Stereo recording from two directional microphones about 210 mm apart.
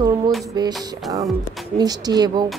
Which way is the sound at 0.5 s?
20° right (ahead or behind).